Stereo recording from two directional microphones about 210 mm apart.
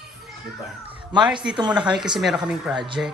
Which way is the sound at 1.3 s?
5° right (ahead or behind).